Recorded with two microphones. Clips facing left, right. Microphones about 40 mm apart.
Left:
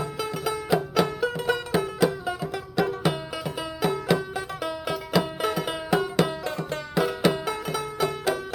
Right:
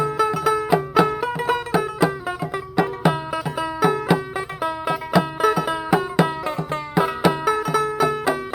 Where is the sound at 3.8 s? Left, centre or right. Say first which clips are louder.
Right 4 dB; right.